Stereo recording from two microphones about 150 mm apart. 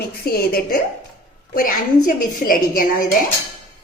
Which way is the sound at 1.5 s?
65° left (ahead or behind).